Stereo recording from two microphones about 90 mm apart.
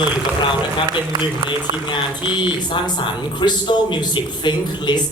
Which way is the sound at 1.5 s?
65° left (ahead or behind).